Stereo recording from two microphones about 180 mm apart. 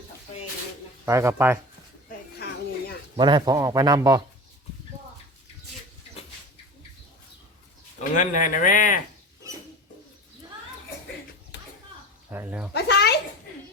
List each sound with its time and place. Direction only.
1.0 s speech: 15° right (ahead or behind)
2.4 s a sound: 60° left (ahead or behind)
3.2 s speech: 25° right (ahead or behind)
8.1 s speech: 45° left (ahead or behind)
12.3 s speech: 10° right (ahead or behind)
12.7 s a child's voice: 65° left (ahead or behind)